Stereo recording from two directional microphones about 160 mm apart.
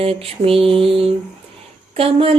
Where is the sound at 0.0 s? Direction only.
35° right (ahead or behind).